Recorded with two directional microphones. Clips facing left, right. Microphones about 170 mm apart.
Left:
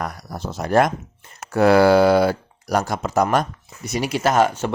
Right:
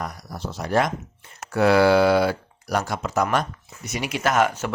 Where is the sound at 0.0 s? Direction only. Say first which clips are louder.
Left 3 dB; 60° left (ahead or behind).